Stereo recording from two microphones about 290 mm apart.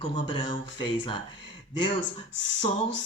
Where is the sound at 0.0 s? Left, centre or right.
Centre.